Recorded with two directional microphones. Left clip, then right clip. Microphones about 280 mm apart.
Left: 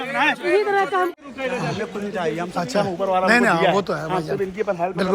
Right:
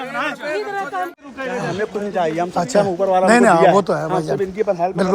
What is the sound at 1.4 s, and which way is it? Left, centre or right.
A man's voice, right.